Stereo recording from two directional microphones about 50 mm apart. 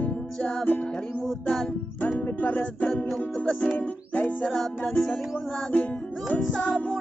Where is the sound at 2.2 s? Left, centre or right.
Left.